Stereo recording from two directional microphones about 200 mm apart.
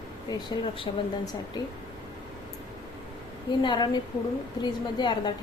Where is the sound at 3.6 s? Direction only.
20° left (ahead or behind).